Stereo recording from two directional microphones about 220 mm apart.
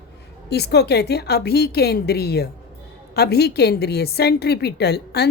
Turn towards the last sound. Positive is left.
turn(degrees=50)  # may be behind; listen again after turning